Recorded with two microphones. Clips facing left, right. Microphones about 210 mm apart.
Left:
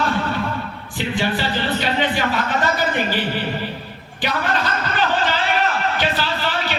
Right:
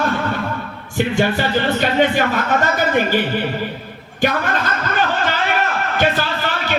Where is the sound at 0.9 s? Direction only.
45° right (ahead or behind).